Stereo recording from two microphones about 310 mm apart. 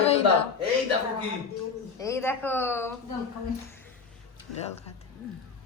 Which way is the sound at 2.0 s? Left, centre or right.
Centre.